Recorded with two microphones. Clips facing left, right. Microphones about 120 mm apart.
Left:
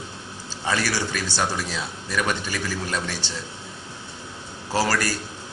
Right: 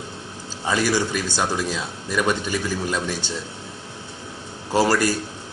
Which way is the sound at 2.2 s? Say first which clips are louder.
Right 5 dB; 25° right (ahead or behind).